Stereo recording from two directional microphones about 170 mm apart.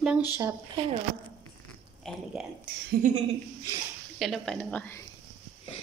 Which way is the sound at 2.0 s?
Centre (ahead or behind).